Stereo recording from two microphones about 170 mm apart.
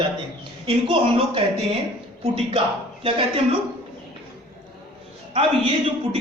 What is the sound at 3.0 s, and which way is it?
Speech, 35° right (ahead or behind).